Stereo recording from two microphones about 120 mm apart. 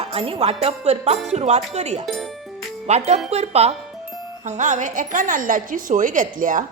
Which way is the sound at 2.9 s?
65° right (ahead or behind).